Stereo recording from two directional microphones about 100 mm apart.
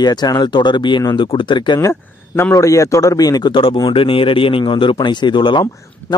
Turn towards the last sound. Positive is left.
turn(degrees=55)  # may be behind; listen again after turning